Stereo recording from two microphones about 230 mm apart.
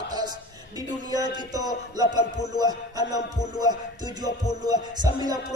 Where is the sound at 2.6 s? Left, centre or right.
Centre.